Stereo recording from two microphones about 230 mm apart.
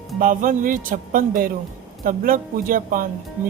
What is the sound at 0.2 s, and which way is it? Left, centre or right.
Speech, right.